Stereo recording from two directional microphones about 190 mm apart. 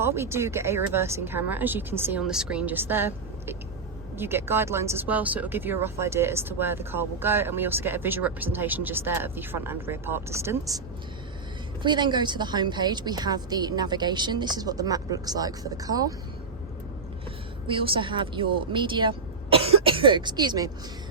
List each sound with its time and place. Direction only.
0.0 s speech: 15° right (ahead or behind)
11.8 s a woman's voice: 25° right (ahead or behind)
17.7 s speech: 30° right (ahead or behind)